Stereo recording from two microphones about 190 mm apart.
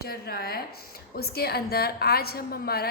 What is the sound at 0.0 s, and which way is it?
A woman's voice, 55° left (ahead or behind).